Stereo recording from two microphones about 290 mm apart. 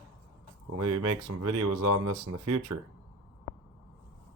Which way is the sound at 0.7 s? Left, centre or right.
Right.